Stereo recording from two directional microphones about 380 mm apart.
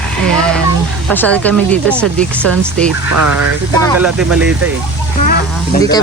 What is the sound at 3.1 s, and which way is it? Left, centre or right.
Speech, right.